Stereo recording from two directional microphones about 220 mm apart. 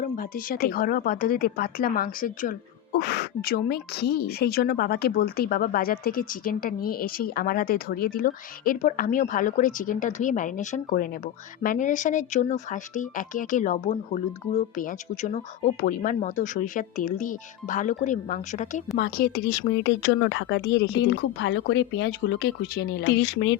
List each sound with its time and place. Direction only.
0.0 s a woman's voice: 40° left (ahead or behind)